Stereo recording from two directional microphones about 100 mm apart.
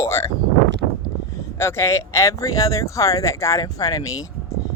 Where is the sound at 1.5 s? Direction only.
25° left (ahead or behind).